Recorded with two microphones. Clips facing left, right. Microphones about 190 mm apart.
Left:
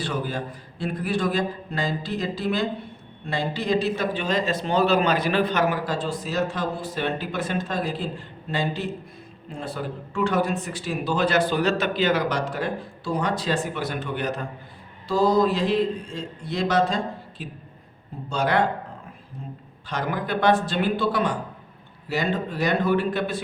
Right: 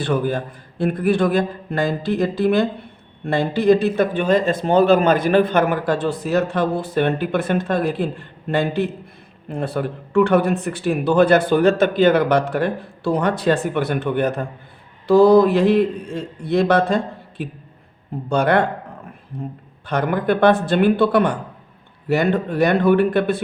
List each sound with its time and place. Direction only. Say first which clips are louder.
0.0 s a man's voice: right 7 dB; 55° right (ahead or behind)
19.9 s a man's voice: right 8 dB; 55° right (ahead or behind)